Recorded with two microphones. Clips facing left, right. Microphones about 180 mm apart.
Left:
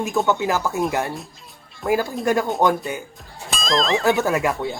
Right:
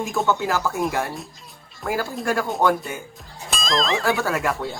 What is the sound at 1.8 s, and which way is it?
Speech, 20° left (ahead or behind).